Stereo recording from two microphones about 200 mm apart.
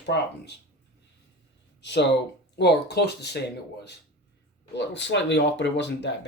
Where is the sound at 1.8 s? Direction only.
60° left (ahead or behind).